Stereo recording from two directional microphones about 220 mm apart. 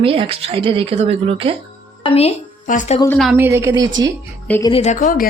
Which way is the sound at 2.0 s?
25° left (ahead or behind).